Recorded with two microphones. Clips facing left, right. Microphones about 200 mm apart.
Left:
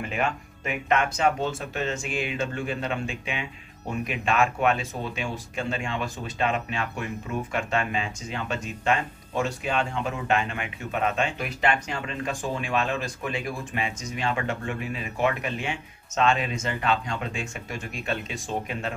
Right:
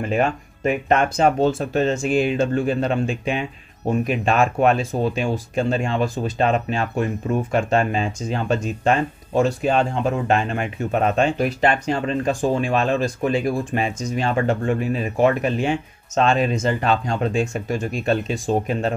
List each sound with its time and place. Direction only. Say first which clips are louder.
0.1 s speech: right 8 dB; 40° right (ahead or behind)